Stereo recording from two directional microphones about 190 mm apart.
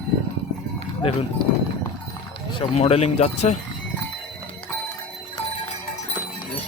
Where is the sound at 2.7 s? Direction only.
35° left (ahead or behind).